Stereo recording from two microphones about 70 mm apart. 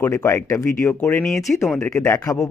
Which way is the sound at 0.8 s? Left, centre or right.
Left.